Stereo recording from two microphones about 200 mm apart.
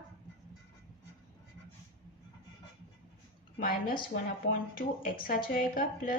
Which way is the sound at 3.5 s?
45° left (ahead or behind).